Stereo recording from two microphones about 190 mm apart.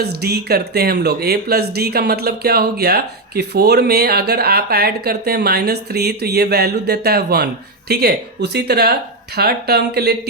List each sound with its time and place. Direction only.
0.0 s speech: 55° right (ahead or behind)